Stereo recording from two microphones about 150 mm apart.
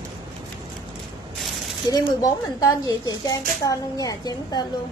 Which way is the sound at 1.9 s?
25° left (ahead or behind).